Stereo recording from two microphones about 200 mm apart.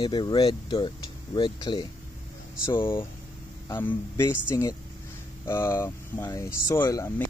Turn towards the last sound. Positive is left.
turn(degrees=15)  # may be behind; listen again after turning